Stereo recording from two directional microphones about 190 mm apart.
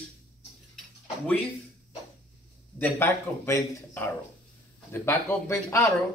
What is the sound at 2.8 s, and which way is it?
Speech, 10° left (ahead or behind).